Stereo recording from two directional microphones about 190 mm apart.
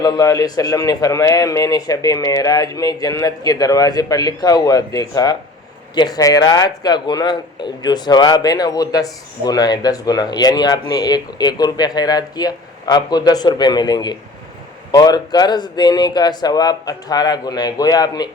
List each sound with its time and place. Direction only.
0.0 s speech: 20° left (ahead or behind)